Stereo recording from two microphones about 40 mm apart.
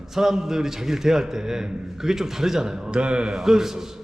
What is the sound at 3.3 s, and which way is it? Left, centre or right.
Speech, centre.